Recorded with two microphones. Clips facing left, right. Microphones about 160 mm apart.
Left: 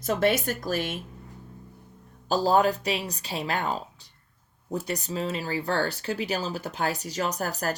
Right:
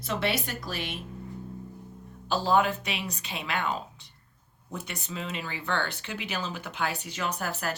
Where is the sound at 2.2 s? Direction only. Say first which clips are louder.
Left 3 dB; 40° left (ahead or behind).